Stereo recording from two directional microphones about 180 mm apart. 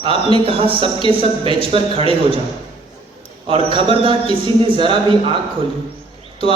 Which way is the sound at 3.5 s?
30° right (ahead or behind).